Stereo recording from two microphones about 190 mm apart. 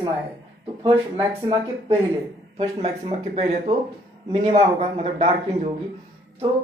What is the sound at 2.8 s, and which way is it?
A man's voice, 35° right (ahead or behind).